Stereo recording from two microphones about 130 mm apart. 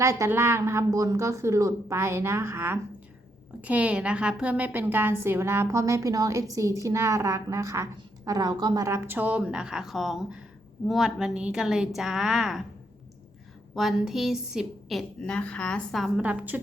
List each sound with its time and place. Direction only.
0.0 s a woman's voice: 25° right (ahead or behind); by 12.6 s 5° right (ahead or behind)
13.7 s a woman's voice: centre (ahead or behind)